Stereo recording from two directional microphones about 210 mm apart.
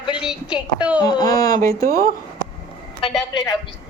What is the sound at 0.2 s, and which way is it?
Speech, 5° right (ahead or behind).